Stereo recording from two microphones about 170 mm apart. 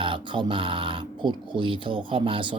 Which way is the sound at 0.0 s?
30° right (ahead or behind).